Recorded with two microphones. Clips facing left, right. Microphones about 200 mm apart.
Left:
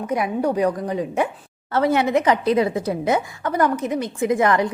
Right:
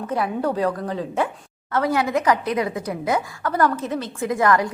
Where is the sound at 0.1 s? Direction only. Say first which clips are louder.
Left 2 dB; 15° left (ahead or behind).